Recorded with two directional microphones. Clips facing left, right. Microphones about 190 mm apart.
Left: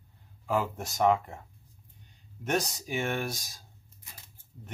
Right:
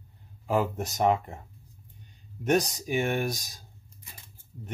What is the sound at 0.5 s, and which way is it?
Speech, 20° right (ahead or behind).